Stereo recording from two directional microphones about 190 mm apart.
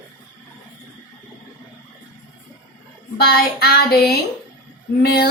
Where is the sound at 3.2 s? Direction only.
55° left (ahead or behind).